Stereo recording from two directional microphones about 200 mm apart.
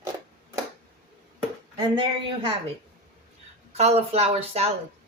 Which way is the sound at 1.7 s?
25° right (ahead or behind).